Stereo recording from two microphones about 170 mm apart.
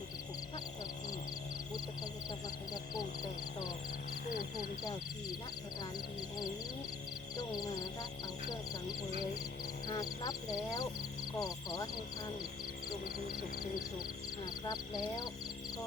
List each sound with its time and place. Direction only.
7.3 s music: 25° left (ahead or behind)
9.8 s speech: 25° left (ahead or behind)
13.1 s speech: 60° left (ahead or behind)
14.6 s speech: 25° left (ahead or behind)